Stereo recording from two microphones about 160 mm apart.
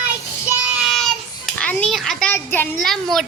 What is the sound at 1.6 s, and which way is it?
A child's voice, 10° left (ahead or behind).